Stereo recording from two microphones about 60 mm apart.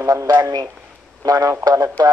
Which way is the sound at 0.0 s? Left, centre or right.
Right.